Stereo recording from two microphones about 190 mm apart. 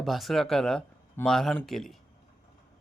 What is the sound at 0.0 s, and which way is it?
Speech, centre (ahead or behind).